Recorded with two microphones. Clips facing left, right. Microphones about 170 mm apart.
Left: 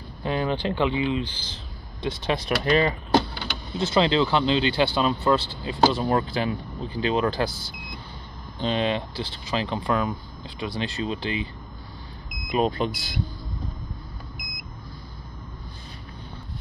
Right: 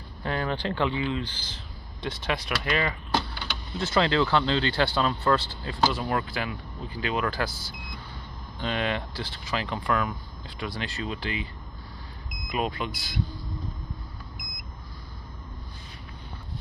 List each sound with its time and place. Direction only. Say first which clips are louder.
0.2 s speech: left 4 dB; 20° left (ahead or behind)
3.7 s speech: left 3 dB; 20° left (ahead or behind)
5.9 s speech: left 5 dB; 30° left (ahead or behind)
8.5 s speech: left 4 dB; 25° left (ahead or behind)
12.4 s speech: left 6 dB; 30° left (ahead or behind)